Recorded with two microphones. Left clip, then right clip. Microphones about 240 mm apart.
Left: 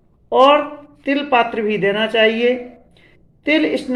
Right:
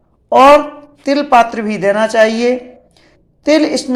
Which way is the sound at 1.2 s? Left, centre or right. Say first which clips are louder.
Right 6 dB; right.